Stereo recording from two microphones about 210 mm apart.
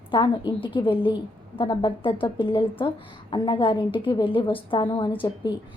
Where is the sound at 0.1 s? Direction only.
25° left (ahead or behind).